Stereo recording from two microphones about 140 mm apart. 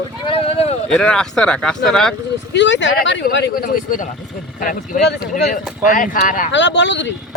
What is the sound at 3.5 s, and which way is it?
Speech, 85° left.